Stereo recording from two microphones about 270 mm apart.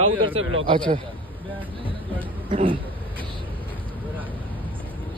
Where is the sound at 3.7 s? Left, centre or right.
Centre.